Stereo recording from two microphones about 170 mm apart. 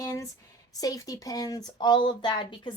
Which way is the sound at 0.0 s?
20° left (ahead or behind).